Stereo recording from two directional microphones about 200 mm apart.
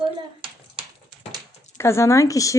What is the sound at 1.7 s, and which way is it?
Speech, 15° left (ahead or behind).